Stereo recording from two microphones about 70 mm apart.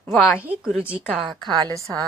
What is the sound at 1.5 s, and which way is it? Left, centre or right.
Speech, right.